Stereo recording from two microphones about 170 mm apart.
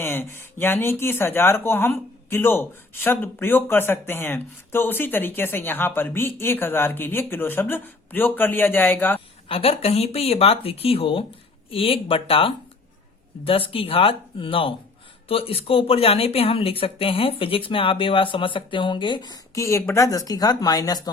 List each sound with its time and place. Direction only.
0.0 s speech: 15° left (ahead or behind)
9.5 s speech: 35° left (ahead or behind)